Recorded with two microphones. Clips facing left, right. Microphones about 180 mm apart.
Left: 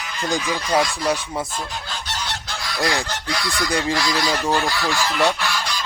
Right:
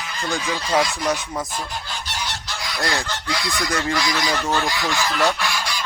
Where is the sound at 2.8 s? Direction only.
20° left (ahead or behind).